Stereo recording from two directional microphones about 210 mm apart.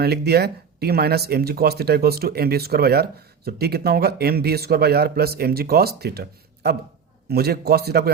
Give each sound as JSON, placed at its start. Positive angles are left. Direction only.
{"t": 0.0, "sound": "speech", "side_deg": -50}